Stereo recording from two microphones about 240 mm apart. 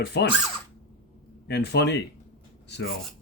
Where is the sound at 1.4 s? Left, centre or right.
Left.